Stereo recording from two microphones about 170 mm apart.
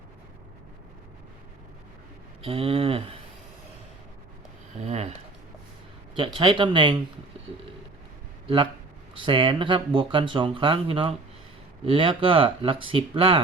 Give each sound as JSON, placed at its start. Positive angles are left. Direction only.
{"t": 2.4, "sound": "speech", "side_deg": -35}
{"t": 4.9, "sound": "speech", "side_deg": -40}
{"t": 6.1, "sound": "speech", "side_deg": -30}
{"t": 8.4, "sound": "speech", "side_deg": -30}